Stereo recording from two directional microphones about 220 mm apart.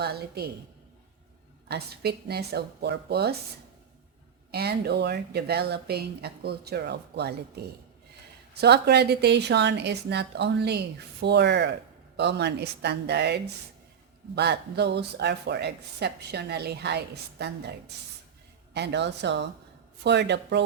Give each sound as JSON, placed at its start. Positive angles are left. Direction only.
{"t": 0.0, "sound": "speech", "side_deg": -45}
{"t": 1.6, "sound": "speech", "side_deg": -45}
{"t": 4.5, "sound": "speech", "side_deg": -45}
{"t": 8.6, "sound": "speech", "side_deg": -50}